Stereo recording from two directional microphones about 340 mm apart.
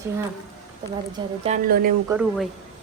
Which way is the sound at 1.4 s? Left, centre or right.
Right.